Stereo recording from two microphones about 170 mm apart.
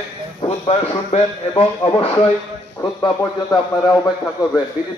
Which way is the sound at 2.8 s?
20° left (ahead or behind).